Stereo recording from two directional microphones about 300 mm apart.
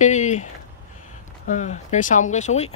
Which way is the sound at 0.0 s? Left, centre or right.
Left.